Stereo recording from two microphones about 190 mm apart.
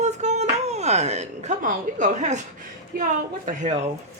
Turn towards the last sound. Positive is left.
turn(degrees=-40)  # may be behind; listen again after turning